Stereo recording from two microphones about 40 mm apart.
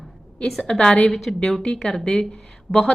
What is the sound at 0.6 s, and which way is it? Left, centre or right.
Speech, left.